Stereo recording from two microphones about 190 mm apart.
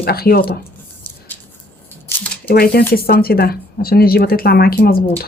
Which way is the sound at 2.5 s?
55° left (ahead or behind).